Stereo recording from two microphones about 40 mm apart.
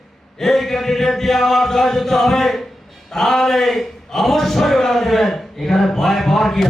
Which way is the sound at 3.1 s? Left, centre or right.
Centre.